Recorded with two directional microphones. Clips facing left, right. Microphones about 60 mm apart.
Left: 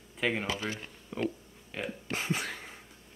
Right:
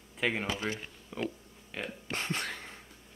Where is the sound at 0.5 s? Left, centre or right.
Right.